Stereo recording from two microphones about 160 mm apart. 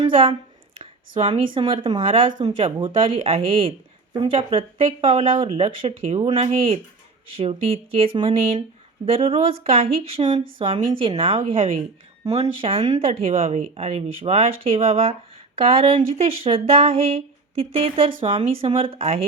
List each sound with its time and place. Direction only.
0.0 s speech: 35° right (ahead or behind)
0.8 s a sound: 35° right (ahead or behind)
1.5 s speech: 30° right (ahead or behind)